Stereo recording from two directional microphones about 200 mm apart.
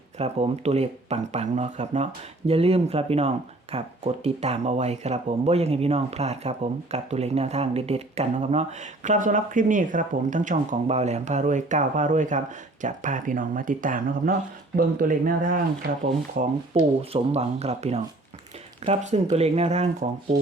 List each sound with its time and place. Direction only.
0.2 s speech: 30° right (ahead or behind)